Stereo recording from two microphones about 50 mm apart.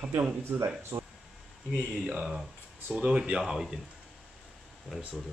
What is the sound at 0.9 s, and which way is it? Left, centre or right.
Speech, right.